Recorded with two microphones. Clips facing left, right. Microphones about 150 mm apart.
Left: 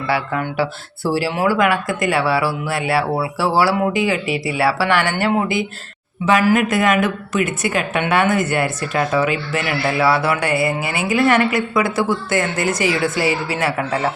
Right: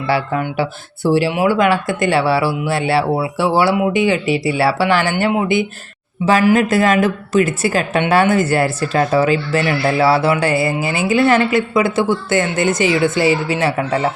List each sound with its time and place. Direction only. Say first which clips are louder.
0.1 s a woman's voice: right 3 dB; 25° right (ahead or behind)